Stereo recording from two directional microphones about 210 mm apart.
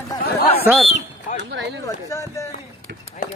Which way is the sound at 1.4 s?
55° right (ahead or behind).